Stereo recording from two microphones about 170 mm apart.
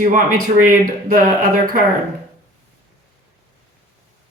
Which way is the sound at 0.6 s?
55° right (ahead or behind).